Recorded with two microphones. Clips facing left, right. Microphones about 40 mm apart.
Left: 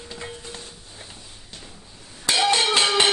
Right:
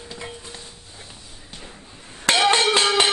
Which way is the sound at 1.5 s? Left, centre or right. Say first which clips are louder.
Right 6 dB; right.